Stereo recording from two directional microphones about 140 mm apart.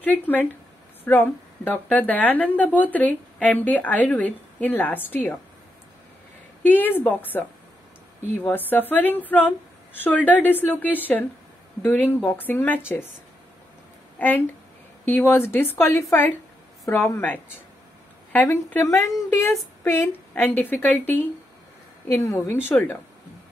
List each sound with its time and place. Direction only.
0.0 s a woman's voice: 10° left (ahead or behind)
6.6 s a woman's voice: 15° left (ahead or behind)
14.1 s a woman's voice: 10° left (ahead or behind)